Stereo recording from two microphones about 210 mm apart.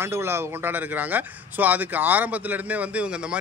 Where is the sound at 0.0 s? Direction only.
10° right (ahead or behind).